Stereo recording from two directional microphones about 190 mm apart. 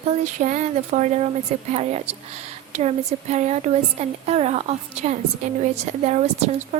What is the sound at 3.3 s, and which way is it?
Speech, 35° right (ahead or behind).